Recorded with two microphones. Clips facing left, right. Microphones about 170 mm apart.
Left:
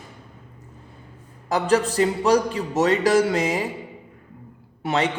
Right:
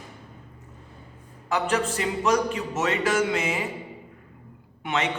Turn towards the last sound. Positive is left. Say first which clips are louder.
# left 4 dB
turn(degrees=35)  # may be behind; listen again after turning